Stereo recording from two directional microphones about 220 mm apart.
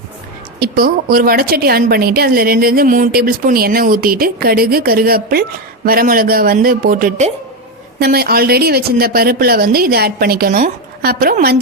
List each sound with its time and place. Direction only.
0.6 s a woman's voice: 40° right (ahead or behind)
7.9 s a woman's voice: 45° right (ahead or behind)